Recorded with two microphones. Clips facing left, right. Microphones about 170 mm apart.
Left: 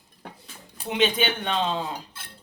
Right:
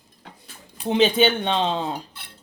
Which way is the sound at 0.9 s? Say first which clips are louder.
Right 6 dB; 30° right (ahead or behind).